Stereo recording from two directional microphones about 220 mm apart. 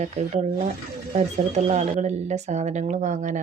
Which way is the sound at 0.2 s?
30° right (ahead or behind).